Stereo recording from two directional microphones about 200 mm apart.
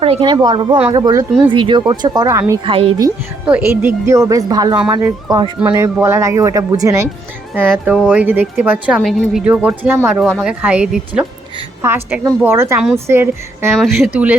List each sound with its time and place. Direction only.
0.0 s speech: 30° right (ahead or behind)
3.4 s speech: 10° right (ahead or behind)
7.9 s speech: 5° right (ahead or behind)
9.0 s speech: 5° left (ahead or behind); by 13.7 s 10° right (ahead or behind)
13.7 s speech: centre (ahead or behind)